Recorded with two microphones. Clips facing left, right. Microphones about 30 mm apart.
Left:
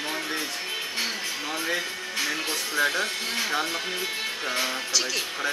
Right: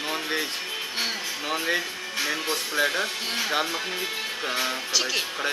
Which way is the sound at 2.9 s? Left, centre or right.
Right.